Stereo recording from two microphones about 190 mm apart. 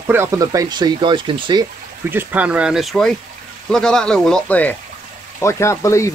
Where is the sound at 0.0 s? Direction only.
15° right (ahead or behind).